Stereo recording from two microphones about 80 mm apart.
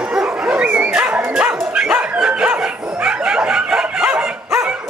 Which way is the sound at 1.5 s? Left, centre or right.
Centre.